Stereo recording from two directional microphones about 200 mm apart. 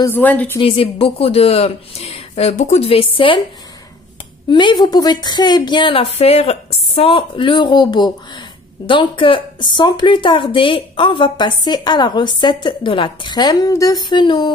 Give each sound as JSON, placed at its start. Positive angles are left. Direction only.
{"t": 0.0, "sound": "a woman's voice", "side_deg": 10}
{"t": 0.6, "sound": "a woman's voice", "side_deg": 25}
{"t": 4.5, "sound": "a woman's voice", "side_deg": 25}